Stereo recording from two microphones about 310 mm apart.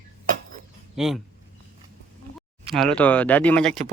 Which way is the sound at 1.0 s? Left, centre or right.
Centre.